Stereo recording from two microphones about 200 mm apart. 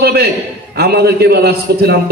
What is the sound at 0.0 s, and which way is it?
A man's voice, 50° right (ahead or behind).